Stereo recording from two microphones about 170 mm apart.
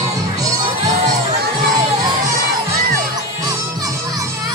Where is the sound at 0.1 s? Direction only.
20° right (ahead or behind).